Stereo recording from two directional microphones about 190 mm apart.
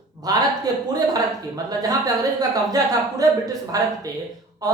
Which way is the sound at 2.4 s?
20° right (ahead or behind).